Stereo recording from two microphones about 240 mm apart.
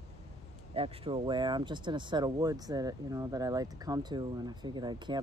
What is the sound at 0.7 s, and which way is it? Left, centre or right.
Speech, right.